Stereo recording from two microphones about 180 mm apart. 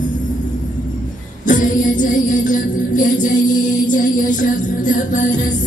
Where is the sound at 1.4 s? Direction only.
45° left (ahead or behind).